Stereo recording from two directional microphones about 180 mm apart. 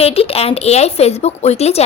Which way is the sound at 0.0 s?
35° left (ahead or behind).